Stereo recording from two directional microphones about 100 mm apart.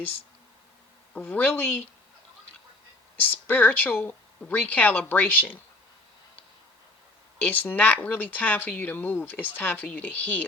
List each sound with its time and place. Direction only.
1.1 s speech: 15° left (ahead or behind)
3.2 s speech: 20° left (ahead or behind)
7.4 s speech: 15° left (ahead or behind)